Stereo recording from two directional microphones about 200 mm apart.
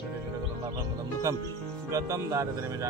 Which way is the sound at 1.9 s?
15° right (ahead or behind).